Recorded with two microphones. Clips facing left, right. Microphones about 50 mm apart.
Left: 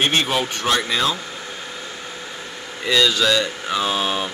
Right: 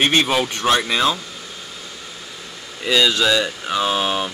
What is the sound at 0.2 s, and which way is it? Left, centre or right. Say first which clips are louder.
Speech: right 2 dB; right.